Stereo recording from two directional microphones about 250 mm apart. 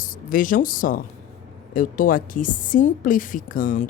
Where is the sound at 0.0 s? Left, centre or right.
Left.